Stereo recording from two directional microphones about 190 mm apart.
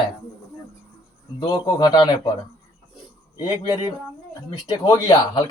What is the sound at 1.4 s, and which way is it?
Speech, 25° left (ahead or behind).